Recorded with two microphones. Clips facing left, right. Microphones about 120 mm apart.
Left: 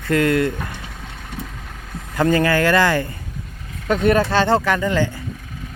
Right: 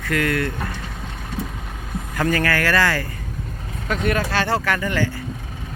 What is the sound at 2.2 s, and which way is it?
Speech, 20° left (ahead or behind).